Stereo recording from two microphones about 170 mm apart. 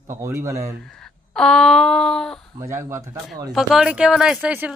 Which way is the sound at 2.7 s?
15° right (ahead or behind).